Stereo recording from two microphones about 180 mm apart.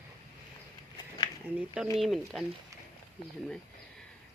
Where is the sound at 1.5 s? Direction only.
5° right (ahead or behind).